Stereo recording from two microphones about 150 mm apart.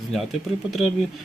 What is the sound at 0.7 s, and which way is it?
Speech, centre (ahead or behind).